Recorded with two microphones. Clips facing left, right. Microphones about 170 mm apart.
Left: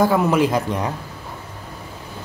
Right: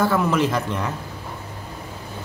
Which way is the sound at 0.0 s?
15° left (ahead or behind).